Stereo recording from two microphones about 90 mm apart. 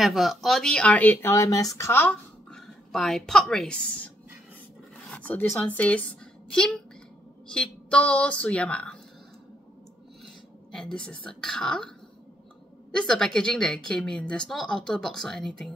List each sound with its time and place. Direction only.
0.0 s a woman's voice: centre (ahead or behind); by 1.3 s 20° left (ahead or behind)
1.3 s speech: 35° left (ahead or behind)
1.9 s speech: 25° left (ahead or behind)
2.5 s speech: 5° left (ahead or behind)
5.1 s a woman's voice: 15° left (ahead or behind)
10.7 s a woman's voice: 5° left (ahead or behind)
12.9 s a woman's voice: 5° left (ahead or behind)